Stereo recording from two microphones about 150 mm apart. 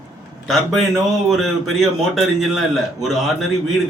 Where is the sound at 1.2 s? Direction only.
Centre (ahead or behind).